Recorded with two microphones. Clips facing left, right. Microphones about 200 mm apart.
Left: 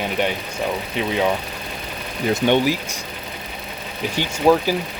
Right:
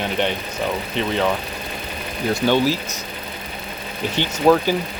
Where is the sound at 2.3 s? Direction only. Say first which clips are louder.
Left 1 dB; 20° left (ahead or behind).